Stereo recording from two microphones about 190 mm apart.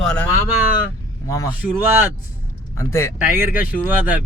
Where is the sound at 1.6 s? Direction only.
10° right (ahead or behind).